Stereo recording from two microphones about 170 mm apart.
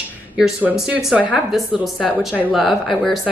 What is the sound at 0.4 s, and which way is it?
Speech, 5° right (ahead or behind).